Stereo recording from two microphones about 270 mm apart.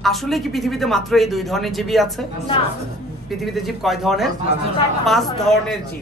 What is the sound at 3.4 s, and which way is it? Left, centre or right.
A man's voice, centre.